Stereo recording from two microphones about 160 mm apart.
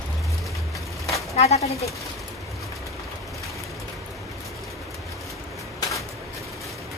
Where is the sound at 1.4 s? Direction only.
40° left (ahead or behind).